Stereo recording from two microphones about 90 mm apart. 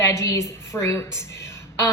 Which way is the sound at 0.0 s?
35° left (ahead or behind).